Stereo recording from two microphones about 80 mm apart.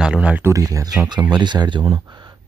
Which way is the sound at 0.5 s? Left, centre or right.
Right.